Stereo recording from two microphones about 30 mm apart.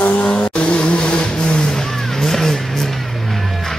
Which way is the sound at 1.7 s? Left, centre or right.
Centre.